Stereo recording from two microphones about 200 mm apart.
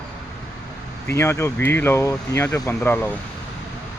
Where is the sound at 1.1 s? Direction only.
15° left (ahead or behind).